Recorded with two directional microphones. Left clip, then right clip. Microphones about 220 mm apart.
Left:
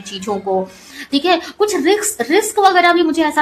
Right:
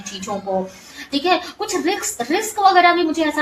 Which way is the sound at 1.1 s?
45° left (ahead or behind).